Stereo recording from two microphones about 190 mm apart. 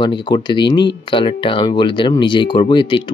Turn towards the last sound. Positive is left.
turn(degrees=25)  # may be behind; listen again after turning